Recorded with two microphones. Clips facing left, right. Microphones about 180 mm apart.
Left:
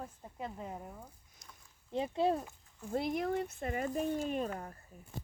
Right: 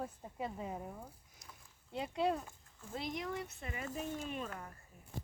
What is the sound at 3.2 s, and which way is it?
Speech, 50° left (ahead or behind).